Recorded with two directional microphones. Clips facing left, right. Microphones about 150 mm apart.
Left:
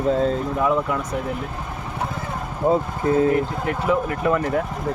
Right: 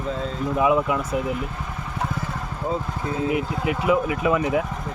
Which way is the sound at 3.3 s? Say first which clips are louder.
Left 3 dB; 10° right (ahead or behind).